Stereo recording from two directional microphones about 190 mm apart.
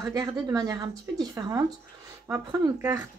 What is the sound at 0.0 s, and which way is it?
Speech, 20° right (ahead or behind).